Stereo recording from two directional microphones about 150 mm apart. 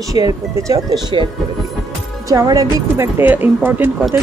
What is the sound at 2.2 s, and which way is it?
Speech, 25° right (ahead or behind).